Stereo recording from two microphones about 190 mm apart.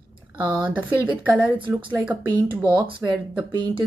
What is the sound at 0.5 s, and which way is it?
Speech, 5° right (ahead or behind).